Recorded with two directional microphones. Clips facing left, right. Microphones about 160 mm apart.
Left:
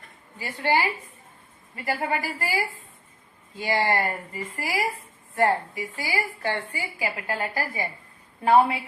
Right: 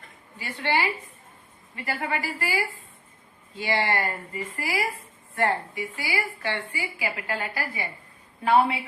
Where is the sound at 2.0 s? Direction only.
30° left (ahead or behind).